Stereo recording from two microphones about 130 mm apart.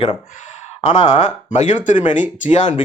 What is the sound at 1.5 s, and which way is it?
Speech, 65° left (ahead or behind).